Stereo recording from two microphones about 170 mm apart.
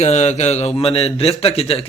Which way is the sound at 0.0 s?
40° left (ahead or behind).